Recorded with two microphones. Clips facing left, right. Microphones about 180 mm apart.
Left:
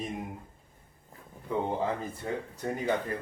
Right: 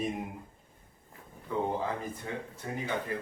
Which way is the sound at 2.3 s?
30° left (ahead or behind).